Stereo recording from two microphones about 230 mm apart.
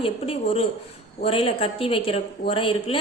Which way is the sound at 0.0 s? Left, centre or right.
Left.